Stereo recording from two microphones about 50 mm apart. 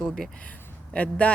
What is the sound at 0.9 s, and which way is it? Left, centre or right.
Speech, left.